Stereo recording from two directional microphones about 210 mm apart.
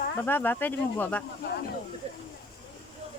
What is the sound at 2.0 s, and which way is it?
Speech, 30° right (ahead or behind).